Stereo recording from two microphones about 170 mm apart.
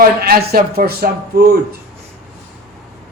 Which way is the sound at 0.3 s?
60° right (ahead or behind).